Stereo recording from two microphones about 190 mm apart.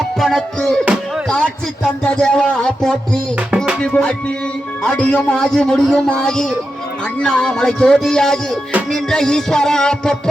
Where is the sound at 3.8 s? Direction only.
5° left (ahead or behind).